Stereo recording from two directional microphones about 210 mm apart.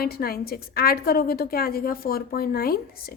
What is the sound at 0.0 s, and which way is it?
A woman's voice, 45° left (ahead or behind).